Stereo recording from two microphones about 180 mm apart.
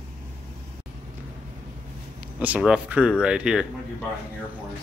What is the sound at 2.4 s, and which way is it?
Speech, 5° right (ahead or behind).